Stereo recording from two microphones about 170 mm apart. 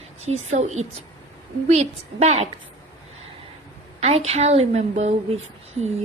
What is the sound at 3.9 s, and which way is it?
A woman's voice, 40° right (ahead or behind).